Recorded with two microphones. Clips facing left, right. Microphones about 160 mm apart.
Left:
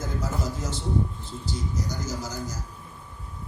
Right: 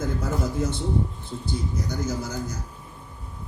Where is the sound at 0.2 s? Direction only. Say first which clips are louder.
Right 4 dB; 55° right (ahead or behind).